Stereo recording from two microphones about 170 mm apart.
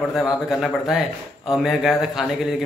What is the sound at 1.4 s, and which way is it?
Speech, centre (ahead or behind).